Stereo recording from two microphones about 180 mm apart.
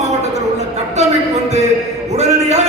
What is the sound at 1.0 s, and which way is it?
Speech, 40° right (ahead or behind).